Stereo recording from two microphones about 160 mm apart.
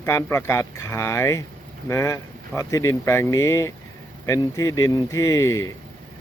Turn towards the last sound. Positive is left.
turn(degrees=20)  # may be behind; listen again after turning